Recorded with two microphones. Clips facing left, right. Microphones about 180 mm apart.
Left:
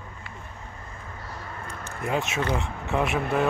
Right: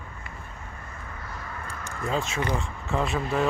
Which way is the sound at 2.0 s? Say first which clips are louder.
Left 1 dB; 15° left (ahead or behind).